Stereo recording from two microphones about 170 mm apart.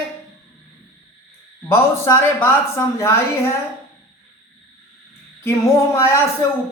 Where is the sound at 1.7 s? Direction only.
15° left (ahead or behind).